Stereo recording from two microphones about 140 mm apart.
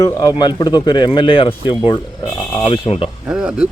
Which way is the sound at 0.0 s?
25° left (ahead or behind).